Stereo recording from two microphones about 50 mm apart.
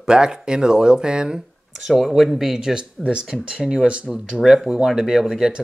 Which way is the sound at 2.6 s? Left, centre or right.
Centre.